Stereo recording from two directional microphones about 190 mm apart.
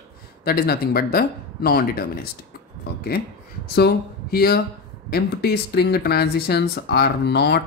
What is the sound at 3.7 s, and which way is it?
Speech, 55° left (ahead or behind).